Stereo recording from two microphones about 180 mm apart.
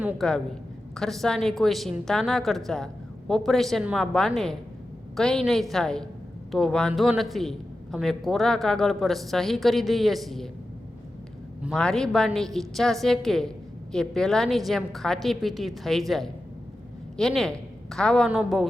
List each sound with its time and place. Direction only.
0.0 s a man's voice: 5° right (ahead or behind)
11.6 s a man's voice: centre (ahead or behind)